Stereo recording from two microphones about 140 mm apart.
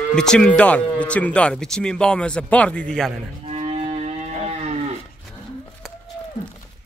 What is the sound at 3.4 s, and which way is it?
Livestock, 50° right (ahead or behind).